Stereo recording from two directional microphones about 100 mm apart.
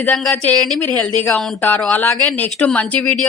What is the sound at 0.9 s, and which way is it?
A woman's voice, 15° left (ahead or behind).